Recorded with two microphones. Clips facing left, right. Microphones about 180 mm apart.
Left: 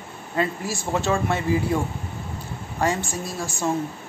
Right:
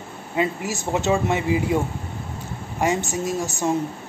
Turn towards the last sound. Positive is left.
turn(degrees=-20)  # may be behind; listen again after turning